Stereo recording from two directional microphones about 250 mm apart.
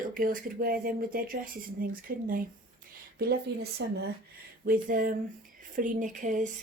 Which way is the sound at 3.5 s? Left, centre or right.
Right.